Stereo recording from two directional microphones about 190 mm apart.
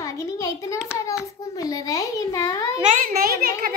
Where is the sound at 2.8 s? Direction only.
45° right (ahead or behind).